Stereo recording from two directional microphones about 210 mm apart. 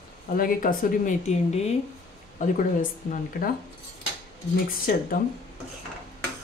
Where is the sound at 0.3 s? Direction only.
40° left (ahead or behind).